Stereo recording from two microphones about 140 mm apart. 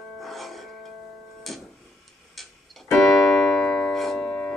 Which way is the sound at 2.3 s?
Centre (ahead or behind).